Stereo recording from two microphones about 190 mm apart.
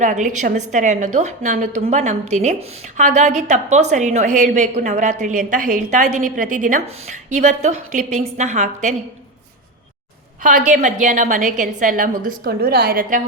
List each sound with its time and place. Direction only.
0.0 s a woman's voice: 40° right (ahead or behind)
10.7 s a woman's voice: 40° right (ahead or behind)